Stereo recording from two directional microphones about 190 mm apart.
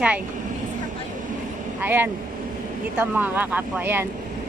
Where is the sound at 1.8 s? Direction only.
10° right (ahead or behind).